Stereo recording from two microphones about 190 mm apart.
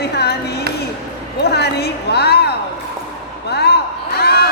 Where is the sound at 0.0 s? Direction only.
60° left (ahead or behind).